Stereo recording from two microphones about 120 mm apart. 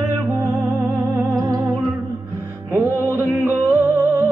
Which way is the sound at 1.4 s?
30° right (ahead or behind).